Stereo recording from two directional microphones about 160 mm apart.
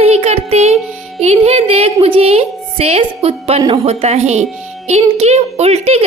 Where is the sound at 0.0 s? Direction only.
40° right (ahead or behind).